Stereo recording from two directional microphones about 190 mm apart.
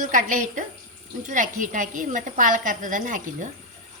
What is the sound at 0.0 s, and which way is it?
A woman's voice, 40° right (ahead or behind).